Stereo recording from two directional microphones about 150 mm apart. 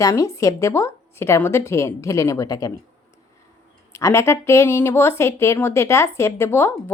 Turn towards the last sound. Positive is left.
turn(degrees=15)  # may be behind; listen again after turning